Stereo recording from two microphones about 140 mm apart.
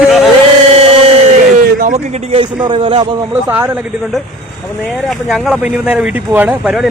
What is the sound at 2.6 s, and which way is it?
Speech, 40° right (ahead or behind).